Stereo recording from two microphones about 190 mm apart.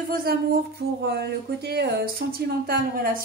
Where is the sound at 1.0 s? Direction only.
60° right (ahead or behind).